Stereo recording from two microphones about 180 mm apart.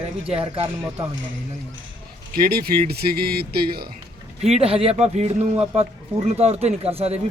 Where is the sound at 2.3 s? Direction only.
55° right (ahead or behind).